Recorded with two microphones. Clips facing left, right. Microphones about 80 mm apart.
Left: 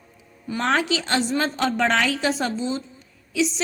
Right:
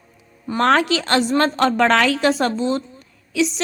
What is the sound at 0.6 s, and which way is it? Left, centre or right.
A woman's voice, right.